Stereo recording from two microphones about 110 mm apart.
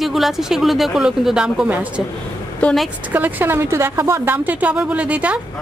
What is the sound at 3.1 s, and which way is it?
A woman's voice, 20° right (ahead or behind).